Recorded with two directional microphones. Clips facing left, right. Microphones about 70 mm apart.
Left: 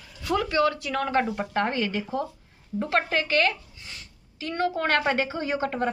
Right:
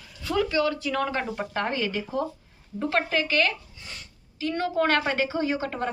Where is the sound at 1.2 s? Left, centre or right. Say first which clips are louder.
Left 3 dB; left.